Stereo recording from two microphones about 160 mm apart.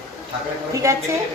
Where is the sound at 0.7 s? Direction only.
20° right (ahead or behind).